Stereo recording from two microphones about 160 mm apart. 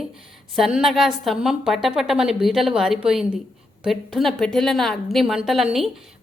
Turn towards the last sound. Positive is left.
turn(degrees=0)  # may be behind; listen again after turning